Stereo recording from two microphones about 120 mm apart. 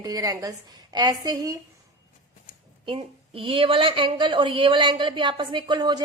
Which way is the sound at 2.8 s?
50° right (ahead or behind).